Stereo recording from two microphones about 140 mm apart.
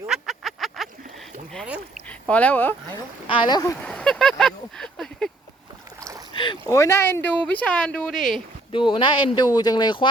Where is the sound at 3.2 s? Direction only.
35° left (ahead or behind).